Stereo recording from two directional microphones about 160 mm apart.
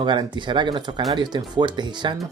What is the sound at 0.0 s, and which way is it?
Speech, 30° right (ahead or behind).